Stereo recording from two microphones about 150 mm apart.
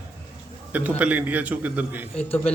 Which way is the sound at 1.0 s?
10° right (ahead or behind).